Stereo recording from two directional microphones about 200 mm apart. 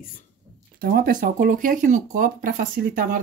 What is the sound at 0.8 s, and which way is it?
Speech, 45° right (ahead or behind).